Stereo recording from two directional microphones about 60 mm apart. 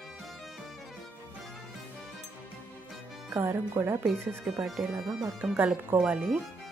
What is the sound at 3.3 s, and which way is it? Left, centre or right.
Speech, right.